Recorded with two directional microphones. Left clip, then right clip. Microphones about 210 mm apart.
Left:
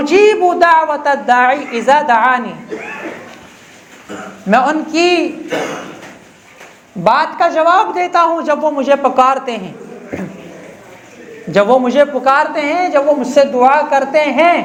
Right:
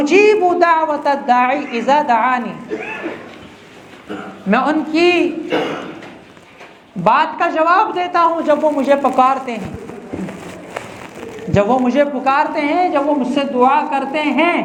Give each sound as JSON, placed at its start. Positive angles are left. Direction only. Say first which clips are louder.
{"t": 0.0, "sound": "a man's voice", "louder": "left 2 dB", "side_deg": 50}
{"t": 4.4, "sound": "a man's voice", "louder": "left 4 dB", "side_deg": 45}
{"t": 7.0, "sound": "a man's voice", "louder": "left 2 dB", "side_deg": 50}
{"t": 11.5, "sound": "a man's voice", "louder": "left 4 dB", "side_deg": 50}